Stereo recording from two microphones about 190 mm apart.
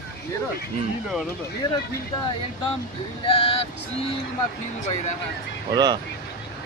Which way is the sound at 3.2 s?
30° left (ahead or behind).